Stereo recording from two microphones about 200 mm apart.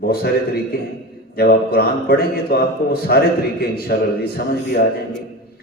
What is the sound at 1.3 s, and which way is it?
A man's voice, 50° left (ahead or behind).